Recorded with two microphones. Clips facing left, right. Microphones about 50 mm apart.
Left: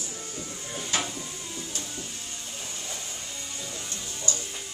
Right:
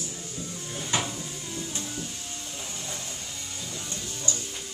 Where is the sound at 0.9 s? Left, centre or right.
Right.